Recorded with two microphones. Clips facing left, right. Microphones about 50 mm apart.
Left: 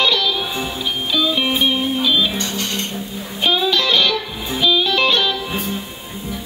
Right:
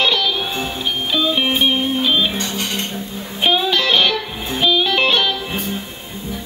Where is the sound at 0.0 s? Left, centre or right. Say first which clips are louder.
Even; centre.